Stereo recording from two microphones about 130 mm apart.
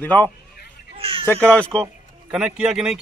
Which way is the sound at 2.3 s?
5° right (ahead or behind).